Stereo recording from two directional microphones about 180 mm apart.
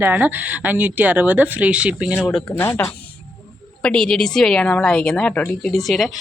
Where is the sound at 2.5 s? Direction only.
15° left (ahead or behind).